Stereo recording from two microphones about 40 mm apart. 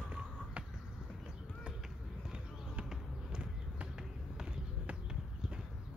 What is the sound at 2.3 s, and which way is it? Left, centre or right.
Basketball bounce, right.